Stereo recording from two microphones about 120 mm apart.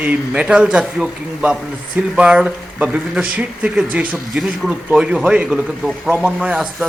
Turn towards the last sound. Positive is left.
turn(degrees=-5)  # may be behind; listen again after turning